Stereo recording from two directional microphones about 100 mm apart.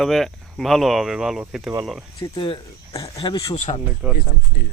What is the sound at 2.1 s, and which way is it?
Speech, 40° left (ahead or behind).